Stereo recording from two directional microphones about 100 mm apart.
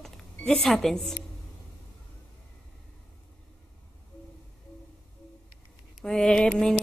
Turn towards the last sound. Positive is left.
turn(degrees=5)  # may be behind; listen again after turning